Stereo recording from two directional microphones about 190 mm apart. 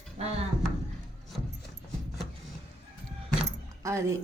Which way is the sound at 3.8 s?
15° right (ahead or behind).